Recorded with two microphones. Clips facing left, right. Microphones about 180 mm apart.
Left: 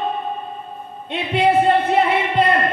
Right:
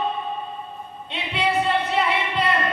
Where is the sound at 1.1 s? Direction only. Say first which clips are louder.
Left 7 dB; 50° left (ahead or behind).